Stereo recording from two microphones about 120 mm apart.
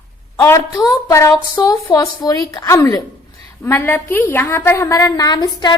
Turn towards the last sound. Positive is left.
turn(degrees=40)  # may be behind; listen again after turning